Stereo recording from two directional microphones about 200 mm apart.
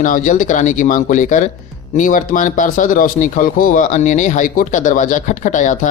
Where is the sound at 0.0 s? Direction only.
40° left (ahead or behind).